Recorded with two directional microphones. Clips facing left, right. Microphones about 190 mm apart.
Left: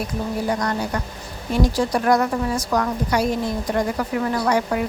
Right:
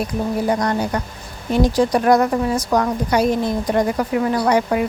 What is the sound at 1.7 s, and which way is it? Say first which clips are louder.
Speech: right 5 dB; 20° right (ahead or behind).